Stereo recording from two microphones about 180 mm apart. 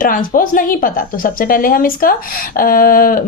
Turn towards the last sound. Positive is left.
turn(degrees=50)  # may be behind; listen again after turning